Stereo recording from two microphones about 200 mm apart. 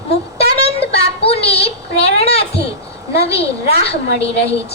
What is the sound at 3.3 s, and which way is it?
Speech, 55° left (ahead or behind).